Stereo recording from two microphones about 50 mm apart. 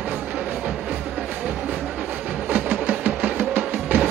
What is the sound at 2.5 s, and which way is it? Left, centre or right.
Music, right.